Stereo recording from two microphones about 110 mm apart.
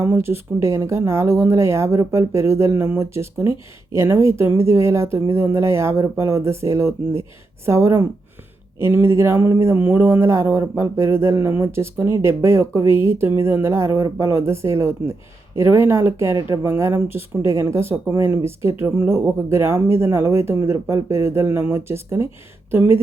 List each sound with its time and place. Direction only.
0.0 s speech: 20° right (ahead or behind)